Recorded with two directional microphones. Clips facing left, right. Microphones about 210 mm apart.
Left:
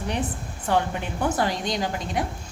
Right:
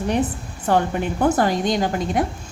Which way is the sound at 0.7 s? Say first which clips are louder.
Right 5 dB; 45° right (ahead or behind).